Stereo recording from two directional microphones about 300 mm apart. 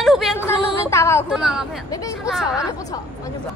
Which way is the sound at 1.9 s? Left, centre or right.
Centre.